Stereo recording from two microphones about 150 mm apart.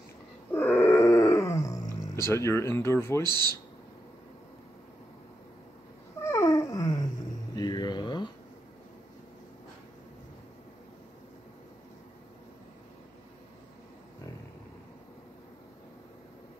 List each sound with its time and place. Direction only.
0.5 s dog: 15° left (ahead or behind)
2.2 s speech: 20° left (ahead or behind)
3.3 s speech: 30° right (ahead or behind)
6.2 s dog: 20° left (ahead or behind)
7.5 s mantra: 30° left (ahead or behind)